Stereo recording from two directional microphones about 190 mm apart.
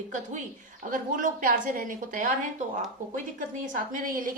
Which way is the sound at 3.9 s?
45° right (ahead or behind).